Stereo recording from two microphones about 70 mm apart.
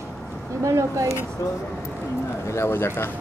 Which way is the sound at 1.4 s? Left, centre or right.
Left.